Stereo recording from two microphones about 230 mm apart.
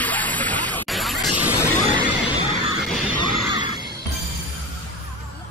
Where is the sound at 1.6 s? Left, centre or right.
Centre.